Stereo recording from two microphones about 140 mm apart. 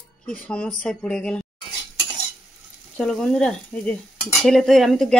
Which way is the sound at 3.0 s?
5° left (ahead or behind).